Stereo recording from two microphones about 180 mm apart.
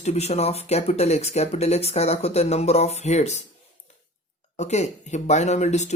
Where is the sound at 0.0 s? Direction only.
35° left (ahead or behind).